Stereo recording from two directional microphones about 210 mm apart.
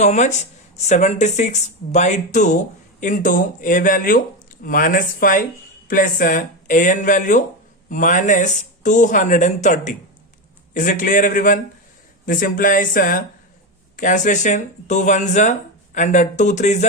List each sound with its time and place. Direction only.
0.0 s speech: 35° left (ahead or behind)